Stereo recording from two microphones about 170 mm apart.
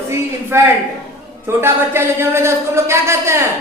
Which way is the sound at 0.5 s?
15° right (ahead or behind).